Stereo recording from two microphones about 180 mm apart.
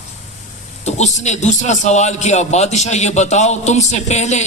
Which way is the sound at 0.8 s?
40° left (ahead or behind).